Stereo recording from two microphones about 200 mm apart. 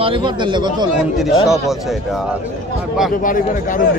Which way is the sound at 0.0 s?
25° right (ahead or behind).